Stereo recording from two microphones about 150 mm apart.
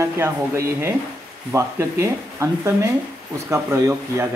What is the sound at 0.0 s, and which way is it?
Speech, 20° right (ahead or behind).